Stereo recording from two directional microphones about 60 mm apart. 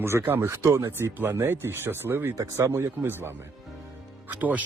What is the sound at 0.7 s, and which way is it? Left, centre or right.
Speech, right.